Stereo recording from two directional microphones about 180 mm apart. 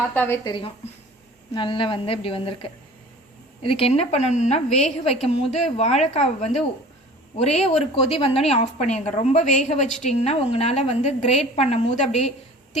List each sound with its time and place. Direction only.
0.1 s a woman's voice: 10° left (ahead or behind)
0.4 s a woman's voice: 25° left (ahead or behind)